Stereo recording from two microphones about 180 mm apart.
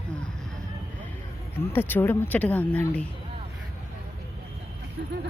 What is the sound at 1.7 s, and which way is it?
A woman's voice, 10° left (ahead or behind).